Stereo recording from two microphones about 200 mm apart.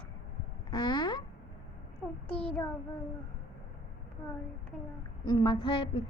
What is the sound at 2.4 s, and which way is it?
Speech, 5° left (ahead or behind).